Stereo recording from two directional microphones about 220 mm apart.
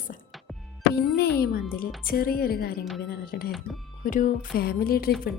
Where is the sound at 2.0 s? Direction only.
45° left (ahead or behind).